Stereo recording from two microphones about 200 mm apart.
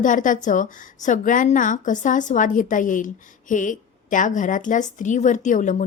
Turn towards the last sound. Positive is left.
turn(degrees=40)  # may be behind; listen again after turning